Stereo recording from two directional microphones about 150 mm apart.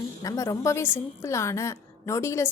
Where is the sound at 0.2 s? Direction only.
20° left (ahead or behind).